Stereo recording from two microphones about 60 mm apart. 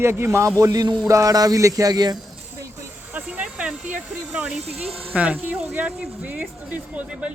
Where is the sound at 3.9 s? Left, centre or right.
Centre.